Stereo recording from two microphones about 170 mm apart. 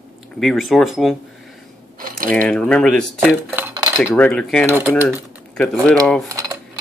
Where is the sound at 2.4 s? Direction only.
5° left (ahead or behind).